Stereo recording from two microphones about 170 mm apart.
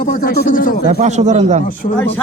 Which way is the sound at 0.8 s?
45° right (ahead or behind).